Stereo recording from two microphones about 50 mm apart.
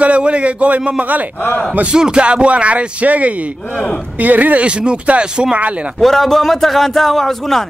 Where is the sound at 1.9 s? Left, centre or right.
Centre.